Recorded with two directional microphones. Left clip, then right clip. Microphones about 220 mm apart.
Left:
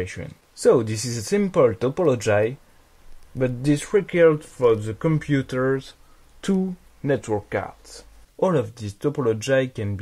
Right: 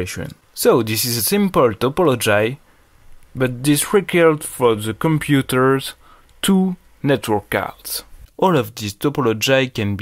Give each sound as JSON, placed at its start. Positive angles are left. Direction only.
{"t": 0.0, "sound": "speech", "side_deg": -15}